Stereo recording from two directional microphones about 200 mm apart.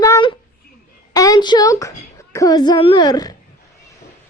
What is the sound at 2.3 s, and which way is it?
A child's voice, 15° left (ahead or behind).